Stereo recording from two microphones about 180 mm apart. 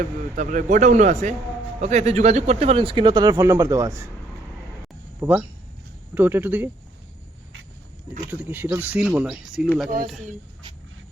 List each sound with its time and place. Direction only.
0.3 s speech: 45° right (ahead or behind); by 3.9 s 15° right (ahead or behind)
5.2 s speech: 10° right (ahead or behind)
8.3 s speech: 10° right (ahead or behind)